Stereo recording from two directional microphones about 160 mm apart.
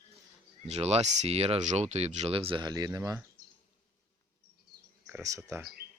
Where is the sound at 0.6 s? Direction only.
40° right (ahead or behind); by 3.2 s 25° right (ahead or behind).